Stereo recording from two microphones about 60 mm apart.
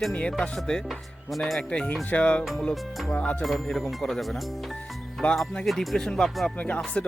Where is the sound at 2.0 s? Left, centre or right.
Left.